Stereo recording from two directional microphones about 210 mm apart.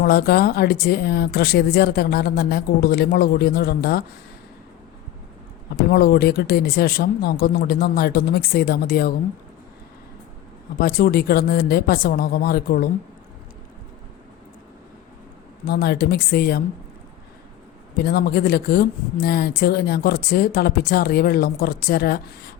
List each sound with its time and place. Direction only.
0.0 s speech: 45° left (ahead or behind)
5.7 s speech: 45° left (ahead or behind)
10.8 s speech: 45° left (ahead or behind)
15.6 s speech: 50° left (ahead or behind)
17.9 s speech: 45° left (ahead or behind)